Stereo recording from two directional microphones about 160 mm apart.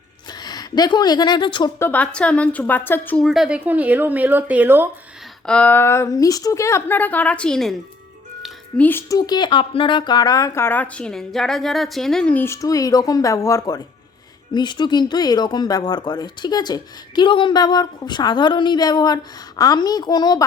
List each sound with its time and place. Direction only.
0.3 s a woman's voice: 25° left (ahead or behind)
1.8 s a woman's voice: 10° left (ahead or behind)
3.2 s speech: 5° right (ahead or behind)
5.5 s a woman's voice: 10° left (ahead or behind)
8.8 s speech: 15° left (ahead or behind)